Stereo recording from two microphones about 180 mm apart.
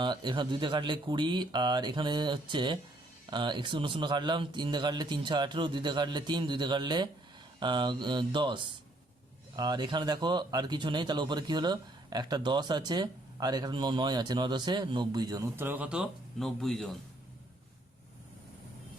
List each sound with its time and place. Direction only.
0.0 s speech: 25° right (ahead or behind); by 16.9 s centre (ahead or behind)